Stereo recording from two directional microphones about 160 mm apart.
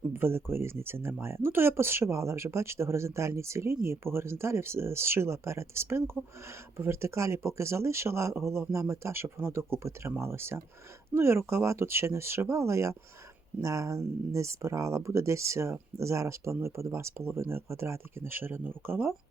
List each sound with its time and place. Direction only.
0.1 s speech: 15° right (ahead or behind)